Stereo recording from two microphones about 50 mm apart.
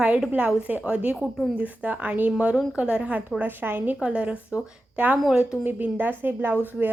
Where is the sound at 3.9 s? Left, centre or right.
Right.